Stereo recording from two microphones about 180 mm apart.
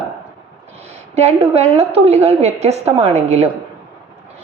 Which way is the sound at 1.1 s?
35° right (ahead or behind).